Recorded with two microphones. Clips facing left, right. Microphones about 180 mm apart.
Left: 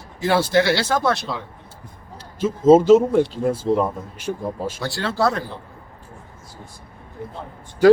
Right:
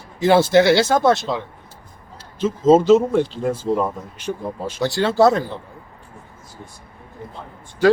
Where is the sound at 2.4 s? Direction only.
10° left (ahead or behind).